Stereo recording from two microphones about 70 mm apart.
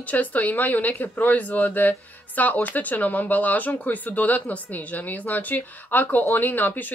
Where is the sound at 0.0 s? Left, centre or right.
Left.